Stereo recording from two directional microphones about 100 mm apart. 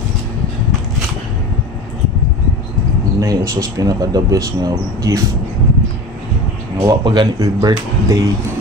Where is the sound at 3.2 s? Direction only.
35° right (ahead or behind).